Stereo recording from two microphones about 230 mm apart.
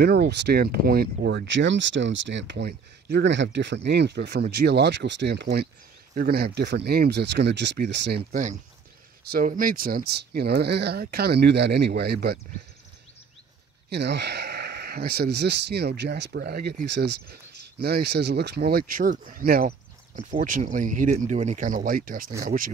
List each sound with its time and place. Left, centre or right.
0.0 s speech: right
8.3 s speech: right
13.8 s speech: right